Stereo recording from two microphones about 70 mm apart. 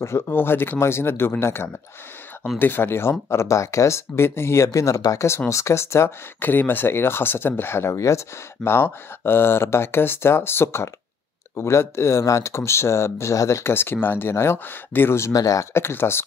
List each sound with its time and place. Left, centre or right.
0.3 s speech: left
4.6 s speech: left
6.4 s speech: left
15.3 s speech: left
15.7 s speech: left